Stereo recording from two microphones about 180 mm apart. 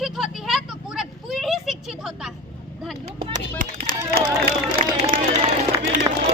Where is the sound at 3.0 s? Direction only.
30° right (ahead or behind).